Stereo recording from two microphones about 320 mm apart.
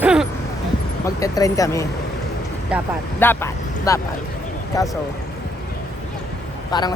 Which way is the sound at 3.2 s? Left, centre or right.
Centre.